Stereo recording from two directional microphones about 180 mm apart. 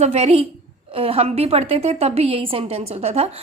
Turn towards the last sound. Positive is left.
turn(degrees=-35)  # may be behind; listen again after turning